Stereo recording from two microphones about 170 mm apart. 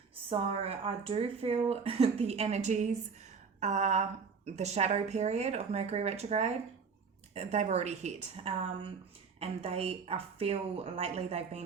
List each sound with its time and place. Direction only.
0.3 s a woman's voice: 35° right (ahead or behind)